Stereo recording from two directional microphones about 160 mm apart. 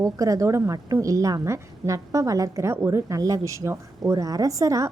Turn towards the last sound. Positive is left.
turn(degrees=-20)  # may be behind; listen again after turning